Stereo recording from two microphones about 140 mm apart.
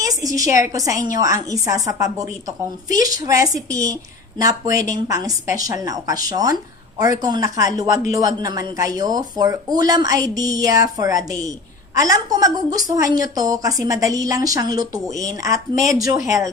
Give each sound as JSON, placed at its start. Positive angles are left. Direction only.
{"t": 0.0, "sound": "a woman's voice", "side_deg": -25}